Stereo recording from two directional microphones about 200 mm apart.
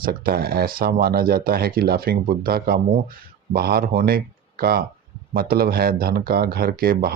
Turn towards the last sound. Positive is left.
turn(degrees=-50)  # may be behind; listen again after turning